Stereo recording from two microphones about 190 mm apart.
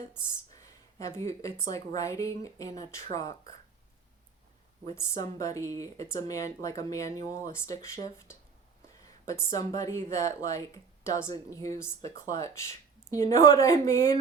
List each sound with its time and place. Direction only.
0.5 s speech: 15° left (ahead or behind)
4.9 s speech: 15° left (ahead or behind)